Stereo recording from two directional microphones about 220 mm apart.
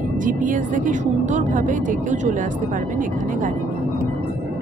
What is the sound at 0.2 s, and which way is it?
Speech, 35° right (ahead or behind).